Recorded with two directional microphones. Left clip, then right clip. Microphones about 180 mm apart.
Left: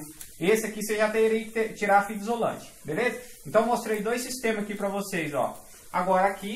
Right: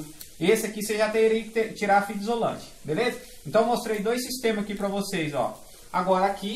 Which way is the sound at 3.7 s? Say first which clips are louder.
Right 1 dB; 10° left (ahead or behind).